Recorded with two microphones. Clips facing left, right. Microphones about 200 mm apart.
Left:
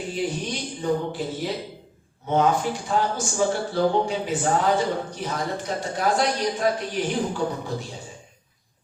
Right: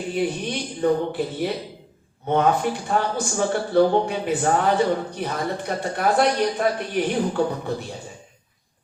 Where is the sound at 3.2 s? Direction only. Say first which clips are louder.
Right 1 dB; 55° right (ahead or behind).